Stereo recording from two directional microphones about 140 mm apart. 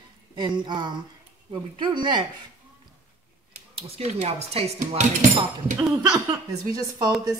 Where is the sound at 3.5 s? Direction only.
45° right (ahead or behind).